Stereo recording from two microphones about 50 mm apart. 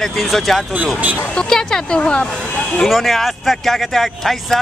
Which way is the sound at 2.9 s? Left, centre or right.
Centre.